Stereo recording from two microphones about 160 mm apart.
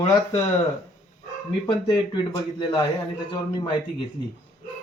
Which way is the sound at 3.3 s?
30° left (ahead or behind).